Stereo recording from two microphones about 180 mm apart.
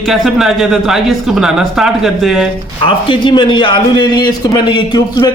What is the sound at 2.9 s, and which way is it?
A man's voice, 30° left (ahead or behind).